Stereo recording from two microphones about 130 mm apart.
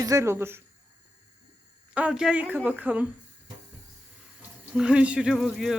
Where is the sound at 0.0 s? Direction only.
25° right (ahead or behind).